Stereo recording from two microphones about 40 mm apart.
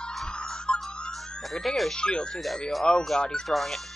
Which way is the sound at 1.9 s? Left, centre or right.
Left.